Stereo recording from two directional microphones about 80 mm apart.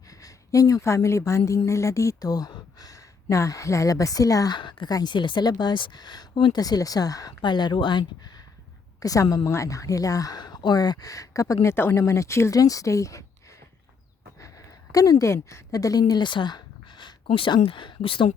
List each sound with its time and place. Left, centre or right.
0.1 s a sound: left
0.8 s speech: left
4.5 s a woman's voice: left
4.9 s speech: left
5.1 s speech: left
6.6 s speech: left
7.4 s speech: left
9.0 s a woman's voice: left
9.2 s speech: left
14.3 s a sound: left
15.3 s a woman's voice: left
15.7 s speech: left